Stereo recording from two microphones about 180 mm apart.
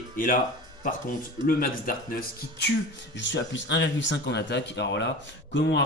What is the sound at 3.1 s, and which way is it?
Music, 85° left.